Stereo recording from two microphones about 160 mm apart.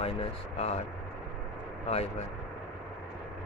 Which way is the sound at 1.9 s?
40° left (ahead or behind).